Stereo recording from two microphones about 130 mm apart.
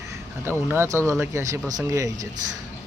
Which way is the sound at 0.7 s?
20° right (ahead or behind).